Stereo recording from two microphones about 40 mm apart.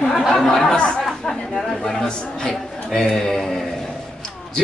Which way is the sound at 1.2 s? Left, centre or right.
Centre.